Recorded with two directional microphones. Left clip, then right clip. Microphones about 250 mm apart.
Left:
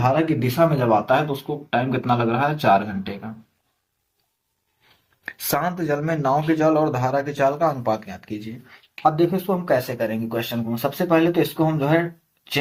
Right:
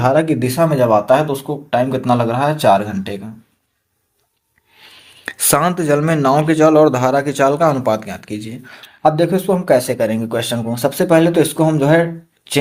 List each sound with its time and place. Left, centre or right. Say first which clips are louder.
0.0 s speech: right 6 dB; right
5.2 s speech: right 8 dB; right